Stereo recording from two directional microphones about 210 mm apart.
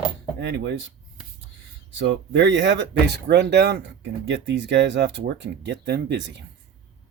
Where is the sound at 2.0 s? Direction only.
55° right (ahead or behind).